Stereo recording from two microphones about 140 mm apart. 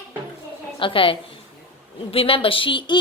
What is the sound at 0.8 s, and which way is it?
A woman's voice, 40° left (ahead or behind).